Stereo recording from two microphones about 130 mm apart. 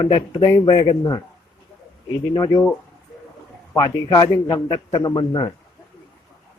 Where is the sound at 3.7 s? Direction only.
30° left (ahead or behind).